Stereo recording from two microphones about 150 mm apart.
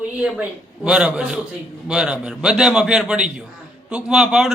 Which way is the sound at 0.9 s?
5° right (ahead or behind).